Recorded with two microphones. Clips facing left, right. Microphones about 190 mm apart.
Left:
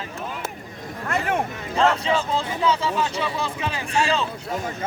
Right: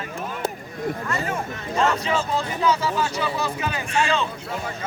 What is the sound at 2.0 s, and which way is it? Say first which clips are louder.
Speech: left 1 dB; 30° left (ahead or behind).